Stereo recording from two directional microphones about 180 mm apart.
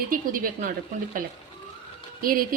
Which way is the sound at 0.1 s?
50° right (ahead or behind).